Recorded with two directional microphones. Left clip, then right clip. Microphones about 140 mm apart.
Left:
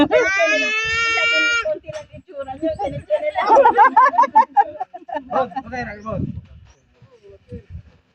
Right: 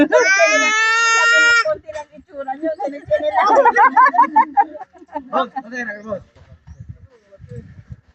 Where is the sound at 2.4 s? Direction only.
10° right (ahead or behind).